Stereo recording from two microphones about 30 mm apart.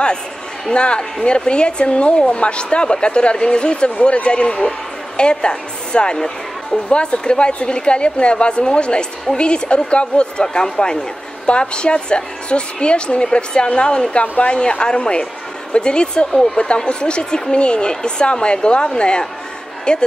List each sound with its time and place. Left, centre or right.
0.7 s a woman's voice: left
6.1 s speech: centre
6.9 s a woman's voice: left
10.4 s a woman's voice: left